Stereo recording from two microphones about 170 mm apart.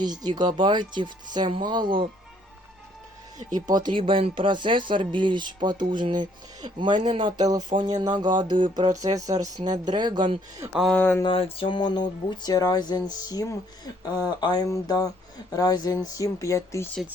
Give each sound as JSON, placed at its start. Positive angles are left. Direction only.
{"t": 0.0, "sound": "speech", "side_deg": -25}
{"t": 3.5, "sound": "speech", "side_deg": -25}
{"t": 10.7, "sound": "speech", "side_deg": -5}
{"t": 10.9, "sound": "speech", "side_deg": 10}
{"t": 11.2, "sound": "speech", "side_deg": 30}